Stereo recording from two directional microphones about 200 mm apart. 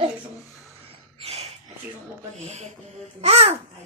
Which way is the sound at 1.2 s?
30° right (ahead or behind).